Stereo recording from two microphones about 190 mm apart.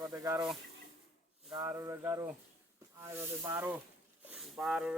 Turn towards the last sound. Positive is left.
turn(degrees=-5)  # may be behind; listen again after turning